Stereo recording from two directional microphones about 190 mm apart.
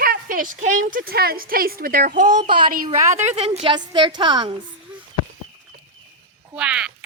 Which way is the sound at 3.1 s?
35° right (ahead or behind).